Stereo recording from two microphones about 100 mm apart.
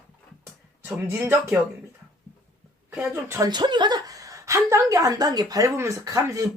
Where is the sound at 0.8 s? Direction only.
20° right (ahead or behind).